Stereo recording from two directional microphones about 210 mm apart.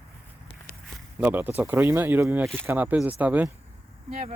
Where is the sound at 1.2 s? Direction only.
10° right (ahead or behind).